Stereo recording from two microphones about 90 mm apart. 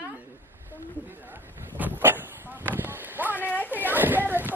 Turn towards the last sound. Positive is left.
turn(degrees=-20)  # may be behind; listen again after turning